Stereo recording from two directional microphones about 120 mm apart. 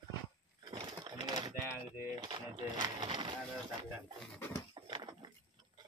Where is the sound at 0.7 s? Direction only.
40° right (ahead or behind).